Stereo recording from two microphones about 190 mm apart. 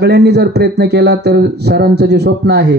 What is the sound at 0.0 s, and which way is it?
Speech, 60° right (ahead or behind).